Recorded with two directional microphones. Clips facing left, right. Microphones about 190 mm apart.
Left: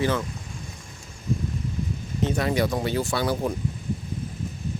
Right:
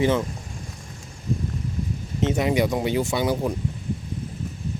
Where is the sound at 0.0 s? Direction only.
20° right (ahead or behind).